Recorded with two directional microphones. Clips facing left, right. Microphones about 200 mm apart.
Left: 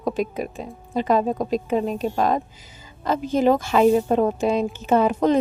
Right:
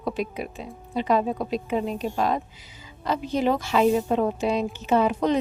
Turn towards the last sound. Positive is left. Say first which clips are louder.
# left 3 dB
turn(degrees=45)  # may be behind; listen again after turning